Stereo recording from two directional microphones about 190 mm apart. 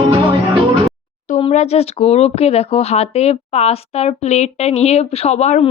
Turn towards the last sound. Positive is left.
turn(degrees=35)  # may be behind; listen again after turning